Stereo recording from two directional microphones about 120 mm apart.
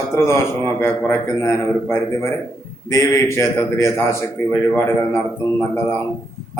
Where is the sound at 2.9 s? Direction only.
25° left (ahead or behind).